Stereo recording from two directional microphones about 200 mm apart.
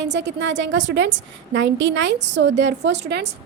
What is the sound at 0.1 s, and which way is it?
A woman's voice, 60° right (ahead or behind).